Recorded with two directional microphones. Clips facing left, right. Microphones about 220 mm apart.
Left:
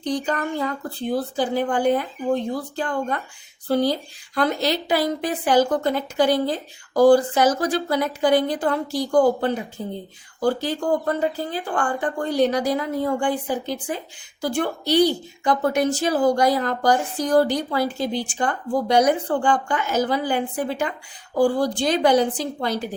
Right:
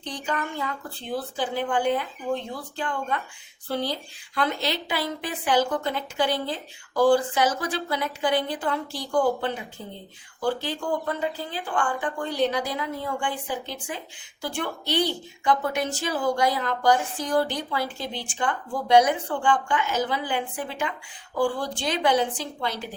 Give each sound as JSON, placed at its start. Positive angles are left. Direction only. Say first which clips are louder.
{"t": 0.0, "sound": "a woman's voice", "louder": "left 7 dB", "side_deg": 40}